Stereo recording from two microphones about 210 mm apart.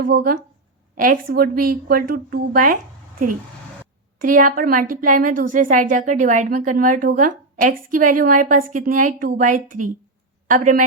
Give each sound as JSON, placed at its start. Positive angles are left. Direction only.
{"t": 0.0, "sound": "a woman's voice", "side_deg": -45}
{"t": 4.2, "sound": "a woman's voice", "side_deg": -40}